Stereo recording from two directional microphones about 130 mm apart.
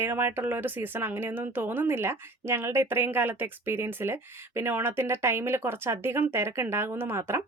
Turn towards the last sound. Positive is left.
turn(degrees=-20)  # may be behind; listen again after turning